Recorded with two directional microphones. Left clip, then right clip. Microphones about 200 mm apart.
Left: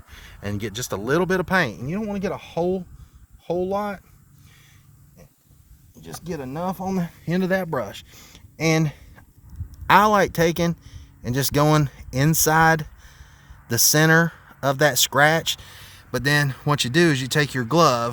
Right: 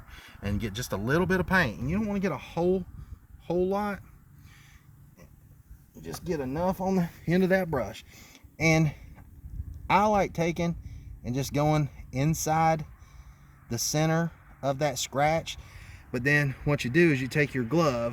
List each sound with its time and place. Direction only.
0.1 s speech: 60° left (ahead or behind)
6.0 s speech: 55° left (ahead or behind)
16.5 s speech: 45° left (ahead or behind)